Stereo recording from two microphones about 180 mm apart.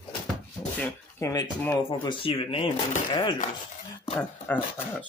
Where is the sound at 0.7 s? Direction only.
10° left (ahead or behind).